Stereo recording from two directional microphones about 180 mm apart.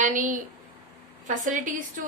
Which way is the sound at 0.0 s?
45° right (ahead or behind).